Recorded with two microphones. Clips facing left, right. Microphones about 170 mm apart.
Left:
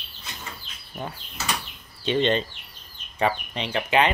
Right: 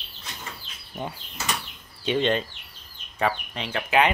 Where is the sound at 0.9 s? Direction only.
10° right (ahead or behind).